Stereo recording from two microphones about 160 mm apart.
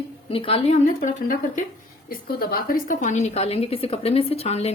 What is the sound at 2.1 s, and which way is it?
A woman's voice, 70° left (ahead or behind).